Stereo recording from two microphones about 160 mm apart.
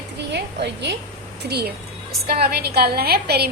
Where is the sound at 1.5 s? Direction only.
90° right.